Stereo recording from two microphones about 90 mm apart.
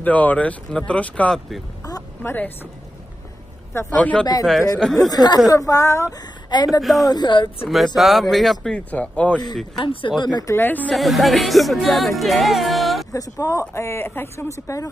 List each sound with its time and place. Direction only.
0.0 s speech: 20° left (ahead or behind)
4.0 s speech: 15° left (ahead or behind)
5.1 s speech: 50° left (ahead or behind)
6.5 s speech: 50° left (ahead or behind)
6.8 s speech: centre (ahead or behind)
7.1 s speech: 55° left (ahead or behind)
7.6 s speech: centre (ahead or behind)
8.7 s speech: 15° left (ahead or behind)
9.8 s speech: 60° left (ahead or behind)
10.4 s speech: 25° left (ahead or behind)
10.9 s speech: centre (ahead or behind)
13.1 s speech: 40° left (ahead or behind)